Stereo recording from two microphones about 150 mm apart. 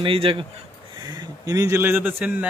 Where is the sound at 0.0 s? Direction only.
35° right (ahead or behind).